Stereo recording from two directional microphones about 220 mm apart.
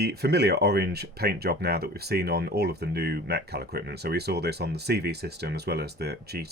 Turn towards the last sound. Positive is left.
turn(degrees=-45)  # may be behind; listen again after turning